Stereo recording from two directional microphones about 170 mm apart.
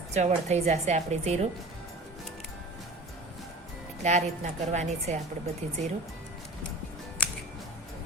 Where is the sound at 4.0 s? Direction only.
40° right (ahead or behind).